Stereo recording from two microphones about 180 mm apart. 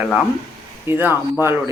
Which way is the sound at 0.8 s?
10° right (ahead or behind).